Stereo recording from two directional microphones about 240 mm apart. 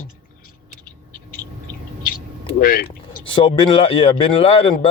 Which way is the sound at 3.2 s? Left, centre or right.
Left.